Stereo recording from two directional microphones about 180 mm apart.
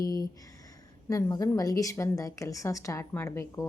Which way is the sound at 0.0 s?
20° left (ahead or behind).